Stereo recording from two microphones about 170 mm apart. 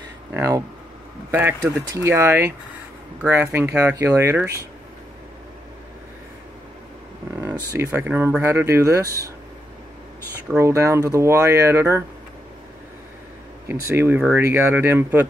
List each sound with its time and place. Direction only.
0.3 s speech: 15° right (ahead or behind)
2.0 s speech: 20° right (ahead or behind)
7.5 s speech: 15° right (ahead or behind)
10.5 s speech: 15° right (ahead or behind)
13.7 s speech: 15° right (ahead or behind)